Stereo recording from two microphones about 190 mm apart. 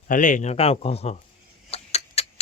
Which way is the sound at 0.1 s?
40° left (ahead or behind).